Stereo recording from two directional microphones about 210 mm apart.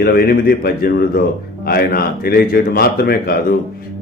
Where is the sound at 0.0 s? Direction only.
45° left (ahead or behind).